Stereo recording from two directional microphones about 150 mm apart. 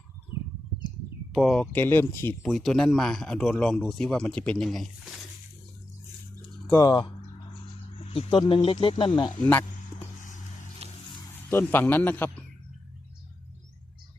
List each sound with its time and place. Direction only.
1.3 s speech: centre (ahead or behind)
1.7 s a man's voice: 15° left (ahead or behind)
2.4 s speech: centre (ahead or behind)
6.7 s speech: 25° left (ahead or behind)
8.0 s speech: 40° left (ahead or behind)
10.2 s vehicle: 55° left (ahead or behind)
11.5 s a man's voice: 15° left (ahead or behind)